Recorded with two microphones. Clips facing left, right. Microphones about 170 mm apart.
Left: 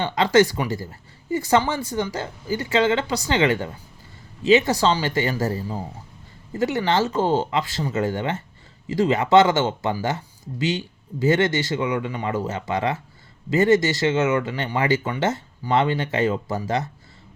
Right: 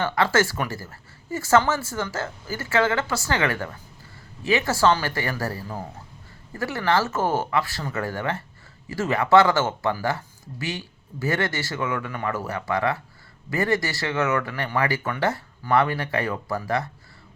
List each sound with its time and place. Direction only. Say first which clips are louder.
0.0 s speech: left 4 dB; 20° left (ahead or behind)